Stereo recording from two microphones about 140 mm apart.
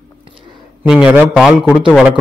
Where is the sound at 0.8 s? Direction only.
5° right (ahead or behind).